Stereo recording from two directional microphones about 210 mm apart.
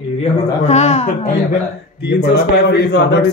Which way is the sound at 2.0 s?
50° left (ahead or behind).